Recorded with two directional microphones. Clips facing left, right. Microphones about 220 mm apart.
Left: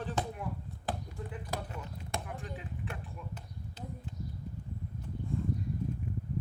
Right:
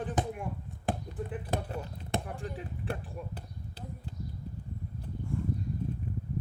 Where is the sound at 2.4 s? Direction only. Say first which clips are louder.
Right 3 dB; 40° right (ahead or behind).